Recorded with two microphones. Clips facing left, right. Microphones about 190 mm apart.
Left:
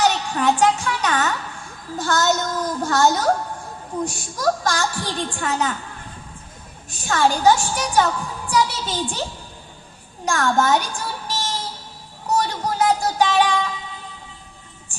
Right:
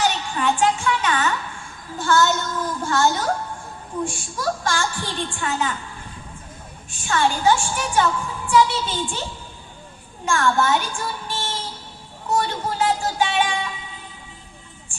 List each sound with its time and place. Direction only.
0.0 s a child's voice: 40° left (ahead or behind)
6.9 s a woman's voice: 40° left (ahead or behind)
10.2 s a woman's voice: 40° left (ahead or behind)
12.3 s music: 40° left (ahead or behind)